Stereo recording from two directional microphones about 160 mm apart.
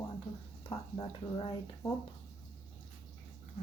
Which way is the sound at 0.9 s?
35° left (ahead or behind).